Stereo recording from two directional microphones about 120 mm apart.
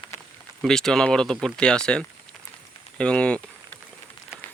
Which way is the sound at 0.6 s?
5° left (ahead or behind).